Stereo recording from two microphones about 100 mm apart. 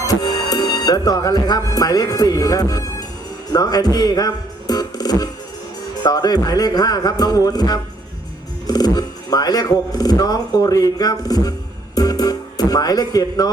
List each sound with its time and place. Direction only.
0.0 s music: 40° left (ahead or behind)
3.5 s speech: 40° left (ahead or behind)
11.9 s music: 40° left (ahead or behind)